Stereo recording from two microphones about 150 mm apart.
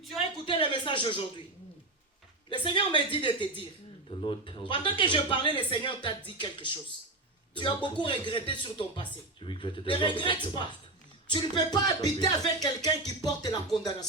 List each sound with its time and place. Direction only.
0.4 s speech: 30° left (ahead or behind)
2.5 s speech: 35° left (ahead or behind)
11.3 s music: 30° left (ahead or behind)